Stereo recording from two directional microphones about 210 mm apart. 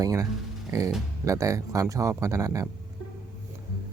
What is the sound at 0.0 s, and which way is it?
Speech, 15° right (ahead or behind).